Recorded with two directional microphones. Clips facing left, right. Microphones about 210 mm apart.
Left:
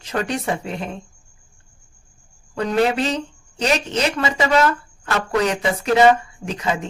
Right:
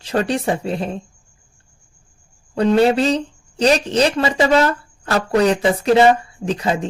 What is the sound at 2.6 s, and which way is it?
Speech, 30° right (ahead or behind).